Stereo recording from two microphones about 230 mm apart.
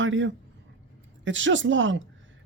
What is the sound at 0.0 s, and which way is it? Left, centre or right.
Speech, right.